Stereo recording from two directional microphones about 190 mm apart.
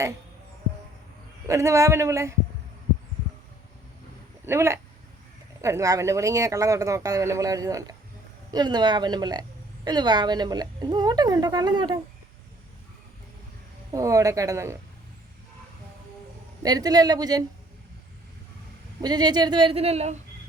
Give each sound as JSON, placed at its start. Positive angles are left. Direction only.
{"t": 1.5, "sound": "speech", "side_deg": -15}
{"t": 4.4, "sound": "a woman's voice", "side_deg": -15}
{"t": 13.9, "sound": "speech", "side_deg": -15}
{"t": 16.6, "sound": "a woman's voice", "side_deg": -20}
{"t": 19.0, "sound": "a woman's voice", "side_deg": -20}